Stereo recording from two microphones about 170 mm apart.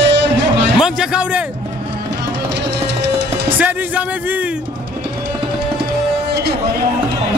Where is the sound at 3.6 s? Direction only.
10° right (ahead or behind).